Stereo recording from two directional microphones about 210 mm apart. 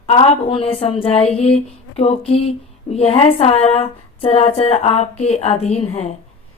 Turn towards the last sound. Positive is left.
turn(degrees=30)  # may be behind; listen again after turning